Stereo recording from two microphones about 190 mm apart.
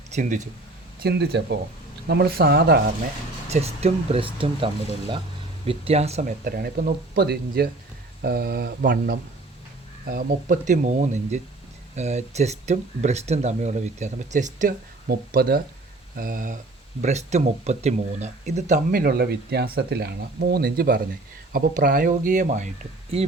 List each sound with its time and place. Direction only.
0.1 s speech: 40° right (ahead or behind)
1.0 s speech: 60° right (ahead or behind)
3.5 s speech: 35° right (ahead or behind)
6.4 s speech: 50° right (ahead or behind)